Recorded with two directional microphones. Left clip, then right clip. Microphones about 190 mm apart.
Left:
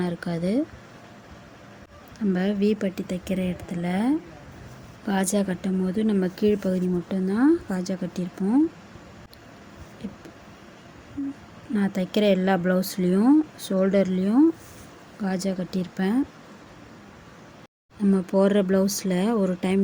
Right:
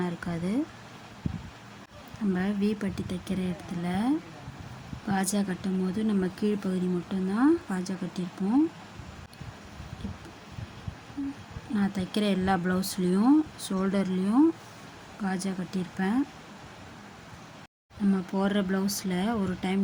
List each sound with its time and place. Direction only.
0.0 s speech: 15° left (ahead or behind)
2.3 s speech: 15° left (ahead or behind)
11.7 s speech: 20° left (ahead or behind)
18.1 s speech: 20° left (ahead or behind)